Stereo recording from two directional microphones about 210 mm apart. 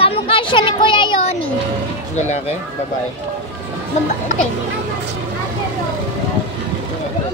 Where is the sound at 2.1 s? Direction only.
35° left (ahead or behind).